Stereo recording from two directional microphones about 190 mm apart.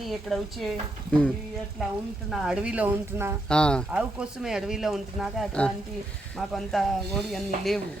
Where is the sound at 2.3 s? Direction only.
5° right (ahead or behind).